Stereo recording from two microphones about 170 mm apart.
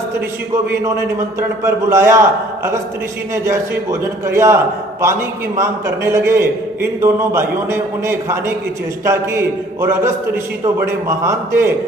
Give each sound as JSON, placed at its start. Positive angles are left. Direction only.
{"t": 1.4, "sound": "a man's voice", "side_deg": -15}
{"t": 3.3, "sound": "a man's voice", "side_deg": -15}